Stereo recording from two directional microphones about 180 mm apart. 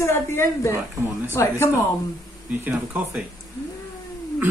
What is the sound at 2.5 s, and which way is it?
Speech, 10° right (ahead or behind).